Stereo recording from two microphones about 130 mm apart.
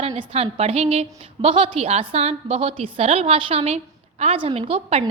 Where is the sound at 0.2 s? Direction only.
45° right (ahead or behind).